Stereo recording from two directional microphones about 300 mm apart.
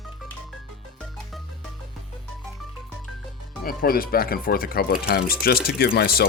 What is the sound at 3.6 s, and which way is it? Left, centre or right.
Speech, left.